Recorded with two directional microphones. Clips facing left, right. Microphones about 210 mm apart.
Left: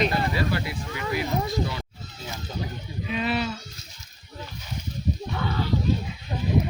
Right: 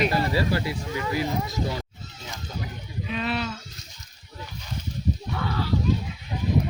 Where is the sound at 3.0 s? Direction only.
5° left (ahead or behind).